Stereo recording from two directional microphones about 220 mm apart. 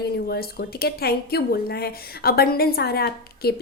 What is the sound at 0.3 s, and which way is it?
A woman's voice, 45° left (ahead or behind).